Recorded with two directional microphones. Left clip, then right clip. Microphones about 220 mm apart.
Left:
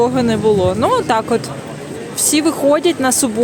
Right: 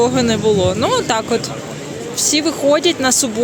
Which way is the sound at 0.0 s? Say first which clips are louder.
Even; 10° left (ahead or behind).